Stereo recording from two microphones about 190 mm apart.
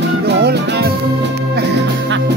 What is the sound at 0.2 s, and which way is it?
Music, 55° right (ahead or behind).